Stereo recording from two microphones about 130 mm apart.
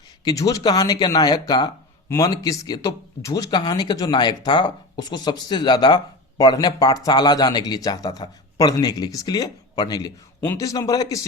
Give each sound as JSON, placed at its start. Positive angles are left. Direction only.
{"t": 0.3, "sound": "speech", "side_deg": 25}